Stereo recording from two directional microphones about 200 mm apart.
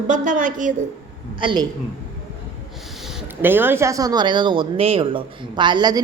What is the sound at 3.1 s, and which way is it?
A woman's voice, 5° right (ahead or behind).